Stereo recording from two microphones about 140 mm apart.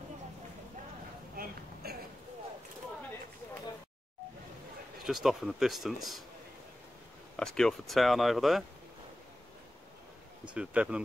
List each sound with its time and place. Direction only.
1.3 s a sound: 90° right
5.0 s speech: centre (ahead or behind)
7.3 s speech: 5° left (ahead or behind)
10.5 s speech: 10° right (ahead or behind)